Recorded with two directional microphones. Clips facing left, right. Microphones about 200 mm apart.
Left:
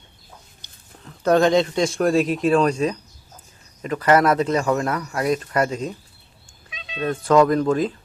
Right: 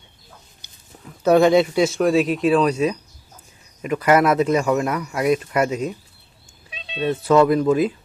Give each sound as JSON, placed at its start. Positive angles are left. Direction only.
{"t": 0.6, "sound": "speech", "side_deg": -10}
{"t": 6.7, "sound": "cat", "side_deg": -30}
{"t": 7.2, "sound": "speech", "side_deg": -5}